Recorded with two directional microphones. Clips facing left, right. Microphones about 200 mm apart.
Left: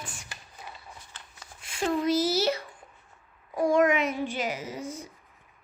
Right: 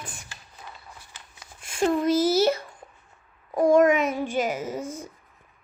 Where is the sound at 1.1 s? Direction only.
10° right (ahead or behind).